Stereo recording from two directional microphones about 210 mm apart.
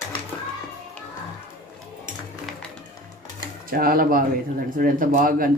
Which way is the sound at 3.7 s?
45° right (ahead or behind).